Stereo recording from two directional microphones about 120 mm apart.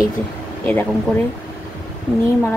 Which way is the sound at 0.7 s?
15° left (ahead or behind).